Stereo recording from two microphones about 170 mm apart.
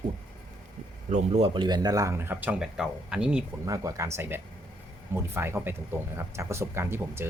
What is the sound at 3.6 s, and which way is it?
Speech, 20° right (ahead or behind).